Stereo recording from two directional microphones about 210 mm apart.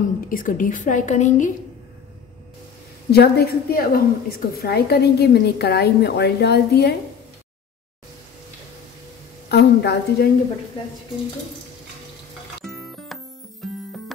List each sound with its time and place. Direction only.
0.3 s a woman's voice: 40° left (ahead or behind)
3.1 s a woman's voice: 50° left (ahead or behind)
9.5 s a woman's voice: 50° left (ahead or behind)
12.6 s music: centre (ahead or behind)